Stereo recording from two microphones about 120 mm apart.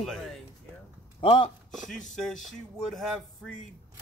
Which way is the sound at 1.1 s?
50° left (ahead or behind).